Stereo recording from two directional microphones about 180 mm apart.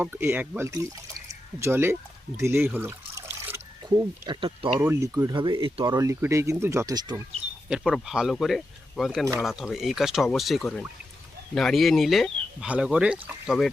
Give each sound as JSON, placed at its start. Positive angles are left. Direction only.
{"t": 0.0, "sound": "speech", "side_deg": -10}
{"t": 4.8, "sound": "speech", "side_deg": -15}
{"t": 7.7, "sound": "speech", "side_deg": -5}